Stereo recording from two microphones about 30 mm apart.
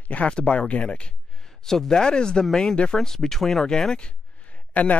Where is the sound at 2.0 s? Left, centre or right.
Left.